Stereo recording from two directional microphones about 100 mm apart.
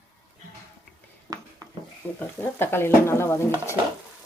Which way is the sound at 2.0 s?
15° left (ahead or behind).